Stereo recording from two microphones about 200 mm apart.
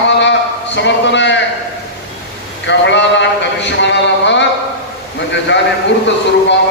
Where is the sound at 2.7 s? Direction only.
60° left (ahead or behind).